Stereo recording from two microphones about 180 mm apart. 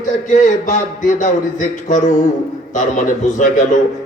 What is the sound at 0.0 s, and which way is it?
A man's voice, 45° left (ahead or behind).